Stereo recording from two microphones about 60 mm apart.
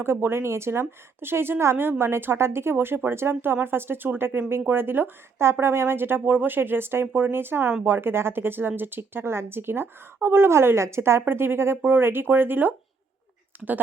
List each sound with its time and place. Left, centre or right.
0.0 s a woman's voice: right